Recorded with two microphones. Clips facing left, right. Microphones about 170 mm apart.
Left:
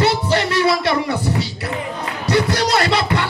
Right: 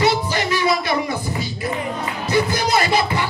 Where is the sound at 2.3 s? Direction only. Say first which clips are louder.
Left 2 dB; 70° left (ahead or behind).